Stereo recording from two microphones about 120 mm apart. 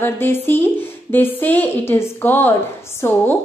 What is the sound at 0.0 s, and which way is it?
A woman's voice, 20° left (ahead or behind).